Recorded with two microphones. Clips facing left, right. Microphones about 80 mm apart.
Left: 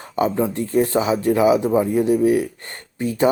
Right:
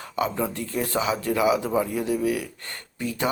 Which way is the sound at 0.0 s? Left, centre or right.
Left.